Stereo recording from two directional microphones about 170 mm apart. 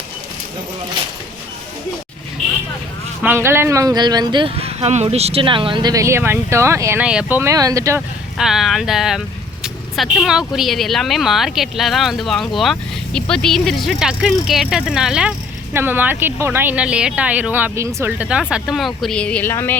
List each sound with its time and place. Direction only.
3.2 s speech: 15° right (ahead or behind)
8.4 s speech: centre (ahead or behind)